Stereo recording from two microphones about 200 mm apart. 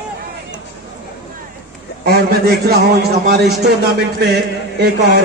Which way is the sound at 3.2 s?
55° right (ahead or behind).